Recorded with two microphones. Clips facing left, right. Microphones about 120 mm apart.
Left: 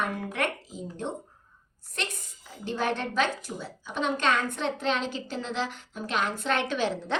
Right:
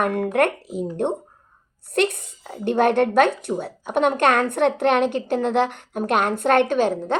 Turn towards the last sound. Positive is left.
turn(degrees=-50)  # may be behind; listen again after turning